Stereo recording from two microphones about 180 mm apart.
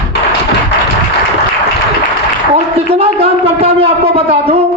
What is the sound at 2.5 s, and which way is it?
A man's voice, 35° right (ahead or behind).